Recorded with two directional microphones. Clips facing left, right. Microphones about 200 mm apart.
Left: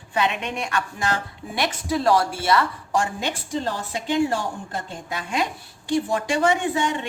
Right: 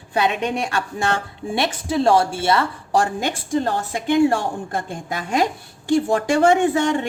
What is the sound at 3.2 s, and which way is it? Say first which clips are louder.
Speech: right 5 dB; 50° right (ahead or behind).